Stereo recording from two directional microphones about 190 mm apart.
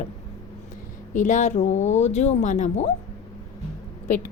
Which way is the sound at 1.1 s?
40° left (ahead or behind).